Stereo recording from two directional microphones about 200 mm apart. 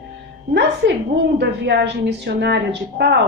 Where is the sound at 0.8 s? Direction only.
60° right (ahead or behind).